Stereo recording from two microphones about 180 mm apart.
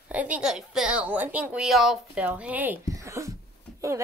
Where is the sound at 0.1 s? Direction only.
5° right (ahead or behind).